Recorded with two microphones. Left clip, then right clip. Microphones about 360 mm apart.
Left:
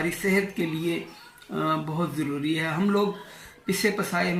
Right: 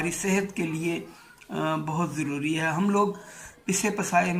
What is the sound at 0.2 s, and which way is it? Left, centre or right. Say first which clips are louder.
Speech: left 2 dB; centre.